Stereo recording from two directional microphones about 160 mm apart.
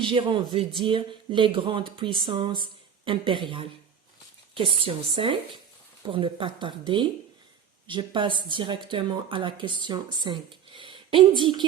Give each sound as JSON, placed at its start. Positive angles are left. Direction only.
{"t": 0.0, "sound": "speech", "side_deg": -30}